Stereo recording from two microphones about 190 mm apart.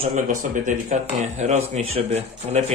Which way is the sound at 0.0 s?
40° right (ahead or behind).